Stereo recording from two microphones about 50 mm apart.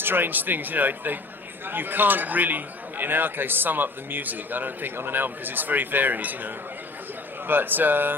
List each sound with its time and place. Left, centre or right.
0.0 s a man's voice: right